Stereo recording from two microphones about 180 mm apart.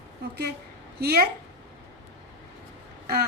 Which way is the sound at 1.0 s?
60° right (ahead or behind).